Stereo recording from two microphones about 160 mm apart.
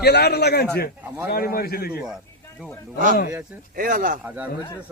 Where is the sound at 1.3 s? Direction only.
70° left (ahead or behind).